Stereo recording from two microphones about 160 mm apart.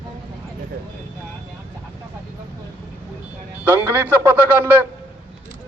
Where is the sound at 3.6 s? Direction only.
15° right (ahead or behind).